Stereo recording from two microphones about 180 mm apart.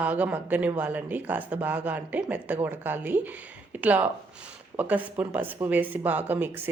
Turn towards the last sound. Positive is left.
turn(degrees=-10)  # may be behind; listen again after turning